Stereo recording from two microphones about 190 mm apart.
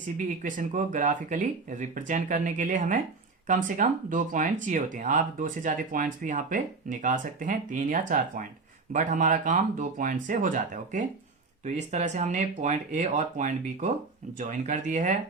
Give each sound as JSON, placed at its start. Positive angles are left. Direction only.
{"t": 0.4, "sound": "speech", "side_deg": -40}